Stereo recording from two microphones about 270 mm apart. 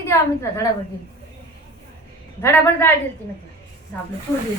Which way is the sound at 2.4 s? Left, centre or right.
Centre.